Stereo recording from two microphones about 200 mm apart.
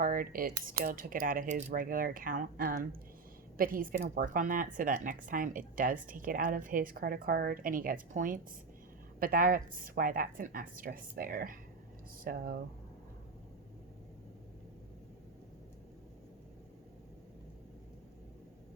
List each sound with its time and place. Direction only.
0.0 s a woman's voice: 45° right (ahead or behind)